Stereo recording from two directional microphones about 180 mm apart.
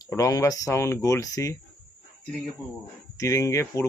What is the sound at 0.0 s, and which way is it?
Speech, 20° left (ahead or behind).